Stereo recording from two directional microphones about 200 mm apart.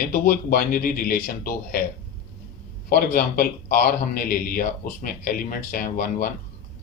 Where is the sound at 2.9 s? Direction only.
45° left (ahead or behind).